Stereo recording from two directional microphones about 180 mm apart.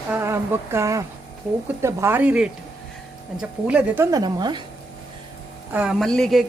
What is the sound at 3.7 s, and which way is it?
Speech, 10° right (ahead or behind).